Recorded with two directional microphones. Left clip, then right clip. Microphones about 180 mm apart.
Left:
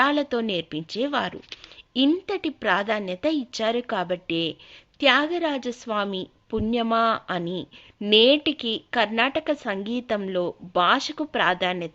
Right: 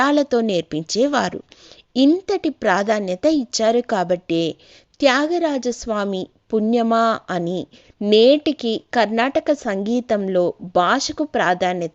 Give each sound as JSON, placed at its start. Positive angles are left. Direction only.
{"t": 0.0, "sound": "a woman's voice", "side_deg": -45}